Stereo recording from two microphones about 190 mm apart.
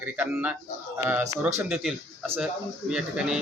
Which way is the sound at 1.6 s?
5° right (ahead or behind).